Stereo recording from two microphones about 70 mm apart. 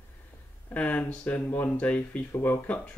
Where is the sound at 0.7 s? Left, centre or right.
Left.